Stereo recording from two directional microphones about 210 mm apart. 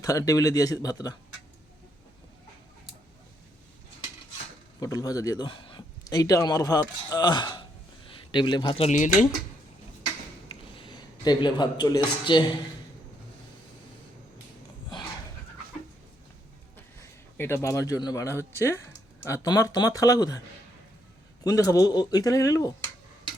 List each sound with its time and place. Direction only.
0.0 s a man's voice: 15° left (ahead or behind)
4.8 s a man's voice: 15° left (ahead or behind); by 9.2 s 35° left (ahead or behind)
10.5 s speech: 25° left (ahead or behind)
17.3 s a man's voice: 10° left (ahead or behind)
21.4 s a man's voice: 15° left (ahead or behind)